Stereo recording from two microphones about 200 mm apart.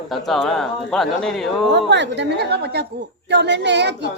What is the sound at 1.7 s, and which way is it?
A woman's voice, 60° right (ahead or behind).